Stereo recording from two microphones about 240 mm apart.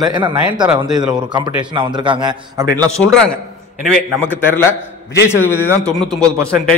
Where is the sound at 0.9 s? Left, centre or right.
Centre.